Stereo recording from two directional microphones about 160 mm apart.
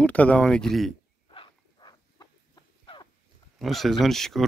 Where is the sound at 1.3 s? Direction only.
30° left (ahead or behind).